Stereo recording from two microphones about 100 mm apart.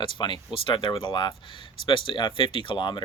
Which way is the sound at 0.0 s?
50° left (ahead or behind).